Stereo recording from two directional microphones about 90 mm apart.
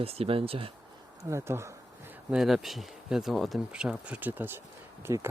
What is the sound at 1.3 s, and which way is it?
Speech, 30° right (ahead or behind).